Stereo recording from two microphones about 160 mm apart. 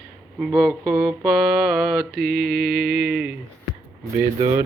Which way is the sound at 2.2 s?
70° right (ahead or behind).